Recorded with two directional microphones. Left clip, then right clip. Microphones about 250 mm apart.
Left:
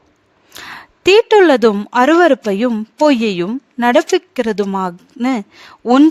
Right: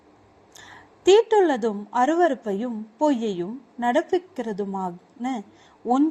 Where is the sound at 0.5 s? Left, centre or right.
Left.